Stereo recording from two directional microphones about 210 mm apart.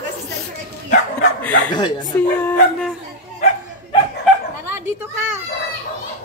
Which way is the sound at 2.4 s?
5° left (ahead or behind).